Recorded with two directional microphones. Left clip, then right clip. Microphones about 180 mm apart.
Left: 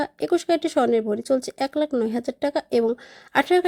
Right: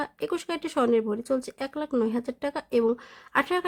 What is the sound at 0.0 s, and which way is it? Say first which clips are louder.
Speech: left 7 dB; 15° left (ahead or behind).